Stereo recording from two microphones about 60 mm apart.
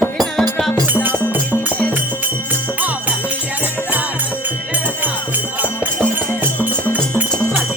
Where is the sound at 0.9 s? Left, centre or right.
Right.